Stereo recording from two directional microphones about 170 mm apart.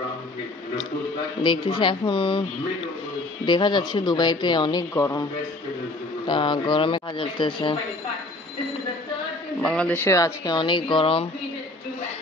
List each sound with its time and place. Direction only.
1.4 s speech: 25° left (ahead or behind)
3.4 s speech: 25° left (ahead or behind)
6.2 s speech: 30° left (ahead or behind)
9.6 s speech: 5° left (ahead or behind); by 11.2 s 30° left (ahead or behind)